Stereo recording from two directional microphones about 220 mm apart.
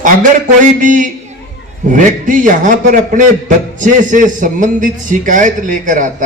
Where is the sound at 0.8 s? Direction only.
35° right (ahead or behind).